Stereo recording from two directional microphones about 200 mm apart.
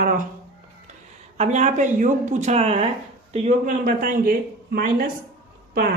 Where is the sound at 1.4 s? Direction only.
35° right (ahead or behind).